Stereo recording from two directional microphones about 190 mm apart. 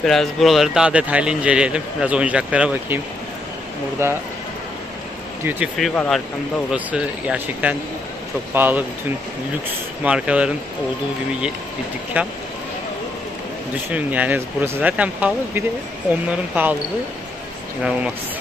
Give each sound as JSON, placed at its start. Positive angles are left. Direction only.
{"t": 0.0, "sound": "speech", "side_deg": 0}
{"t": 4.0, "sound": "speech", "side_deg": -15}
{"t": 5.4, "sound": "speech", "side_deg": -10}
{"t": 5.8, "sound": "speech", "side_deg": 0}
{"t": 10.0, "sound": "speech", "side_deg": -5}
{"t": 12.2, "sound": "speech", "side_deg": -10}
{"t": 13.8, "sound": "speech", "side_deg": -10}